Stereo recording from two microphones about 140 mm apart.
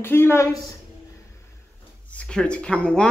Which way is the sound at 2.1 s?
10° left (ahead or behind).